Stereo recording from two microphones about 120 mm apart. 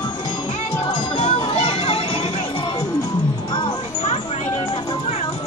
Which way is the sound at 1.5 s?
55° left (ahead or behind).